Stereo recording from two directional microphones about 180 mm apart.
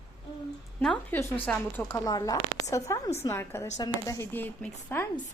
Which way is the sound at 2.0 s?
20° left (ahead or behind).